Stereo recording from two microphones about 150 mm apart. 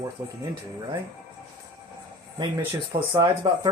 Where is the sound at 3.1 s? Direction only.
25° right (ahead or behind).